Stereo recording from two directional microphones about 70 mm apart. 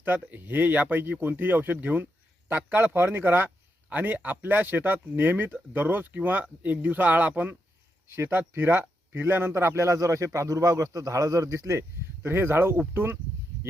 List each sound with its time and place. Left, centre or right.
0.0 s speech: right